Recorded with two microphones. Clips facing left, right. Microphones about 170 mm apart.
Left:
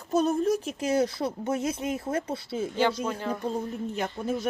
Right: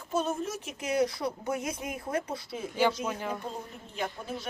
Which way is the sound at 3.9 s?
45° left (ahead or behind).